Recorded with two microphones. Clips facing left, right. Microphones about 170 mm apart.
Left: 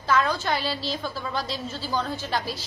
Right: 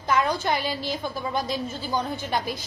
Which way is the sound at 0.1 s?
10° right (ahead or behind).